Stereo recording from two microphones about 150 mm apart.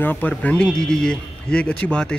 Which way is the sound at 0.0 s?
10° left (ahead or behind).